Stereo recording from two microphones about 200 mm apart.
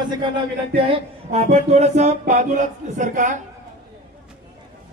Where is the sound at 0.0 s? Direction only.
20° right (ahead or behind).